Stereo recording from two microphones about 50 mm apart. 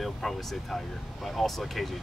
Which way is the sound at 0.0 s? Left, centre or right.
Centre.